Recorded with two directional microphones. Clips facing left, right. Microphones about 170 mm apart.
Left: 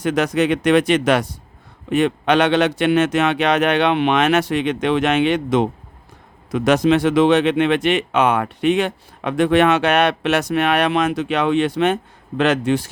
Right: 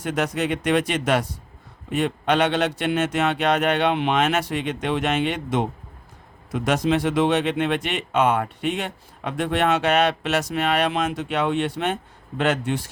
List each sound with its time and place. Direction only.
0.0 s speech: 85° left